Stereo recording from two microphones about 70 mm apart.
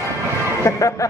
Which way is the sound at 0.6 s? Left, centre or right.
Left.